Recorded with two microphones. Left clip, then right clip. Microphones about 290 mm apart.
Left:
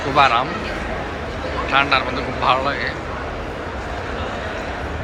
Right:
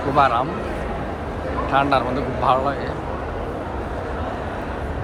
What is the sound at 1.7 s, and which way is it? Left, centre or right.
Speech, centre.